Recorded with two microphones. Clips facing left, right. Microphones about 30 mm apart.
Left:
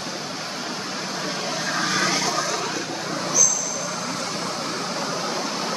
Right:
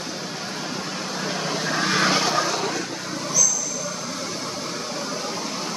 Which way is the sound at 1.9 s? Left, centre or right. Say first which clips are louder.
Right 3 dB; right.